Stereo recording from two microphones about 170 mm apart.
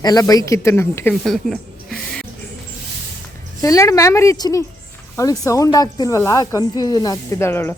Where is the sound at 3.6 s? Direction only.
20° left (ahead or behind).